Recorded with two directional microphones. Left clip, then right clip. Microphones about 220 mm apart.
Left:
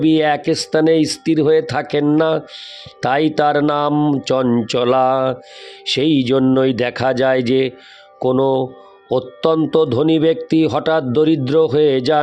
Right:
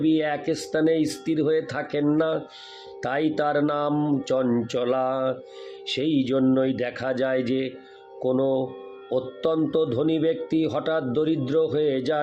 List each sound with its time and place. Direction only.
0.0 s speech: 45° left (ahead or behind)